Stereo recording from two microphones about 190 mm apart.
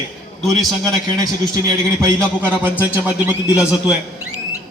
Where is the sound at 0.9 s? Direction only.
20° right (ahead or behind).